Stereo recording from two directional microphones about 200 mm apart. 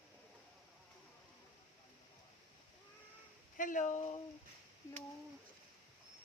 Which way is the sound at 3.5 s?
40° left (ahead or behind).